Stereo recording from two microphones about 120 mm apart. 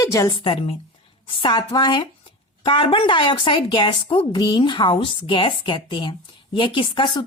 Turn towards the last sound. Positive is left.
turn(degrees=45)  # may be behind; listen again after turning